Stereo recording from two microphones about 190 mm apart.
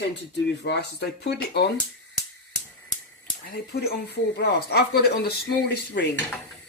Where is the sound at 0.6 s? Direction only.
65° left (ahead or behind).